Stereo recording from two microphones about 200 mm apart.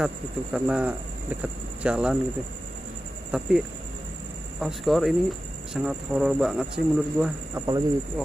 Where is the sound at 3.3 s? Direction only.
5° right (ahead or behind).